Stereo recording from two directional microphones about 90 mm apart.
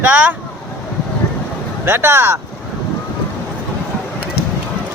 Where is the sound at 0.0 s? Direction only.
15° right (ahead or behind).